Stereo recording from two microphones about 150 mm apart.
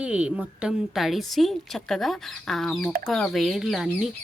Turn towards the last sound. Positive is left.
turn(degrees=0)  # may be behind; listen again after turning